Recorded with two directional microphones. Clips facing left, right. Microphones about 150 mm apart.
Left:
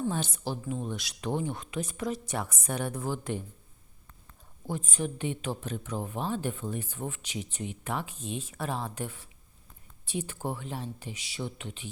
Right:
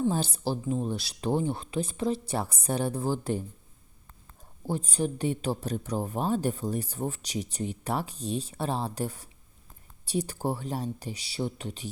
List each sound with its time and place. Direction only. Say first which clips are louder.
0.1 s speech: right 4 dB; 35° right (ahead or behind)
4.6 s speech: right 4 dB; 35° right (ahead or behind)